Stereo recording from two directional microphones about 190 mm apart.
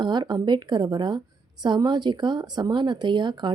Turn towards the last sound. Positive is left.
turn(degrees=-25)  # may be behind; listen again after turning